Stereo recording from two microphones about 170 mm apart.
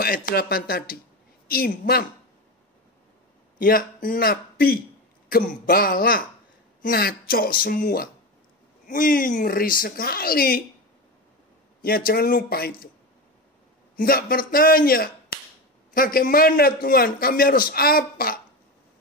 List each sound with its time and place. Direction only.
0.0 s a man's voice: 60° left (ahead or behind)
3.5 s a man's voice: 55° left (ahead or behind)
11.8 s a man's voice: 60° left (ahead or behind)
13.9 s a man's voice: 60° left (ahead or behind)